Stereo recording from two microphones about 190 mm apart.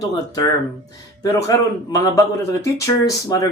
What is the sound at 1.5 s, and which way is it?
Speech, 15° left (ahead or behind).